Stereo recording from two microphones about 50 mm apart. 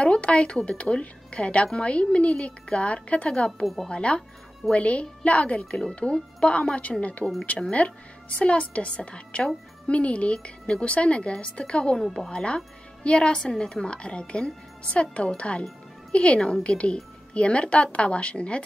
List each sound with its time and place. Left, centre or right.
0.0 s a woman's voice: left
3.6 s a woman's voice: centre
3.9 s a woman's voice: left
8.4 s a woman's voice: left
12.0 s a woman's voice: centre
12.3 s a woman's voice: centre